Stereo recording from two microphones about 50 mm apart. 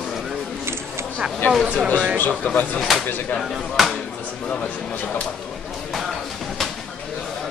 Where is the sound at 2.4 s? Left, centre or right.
Left.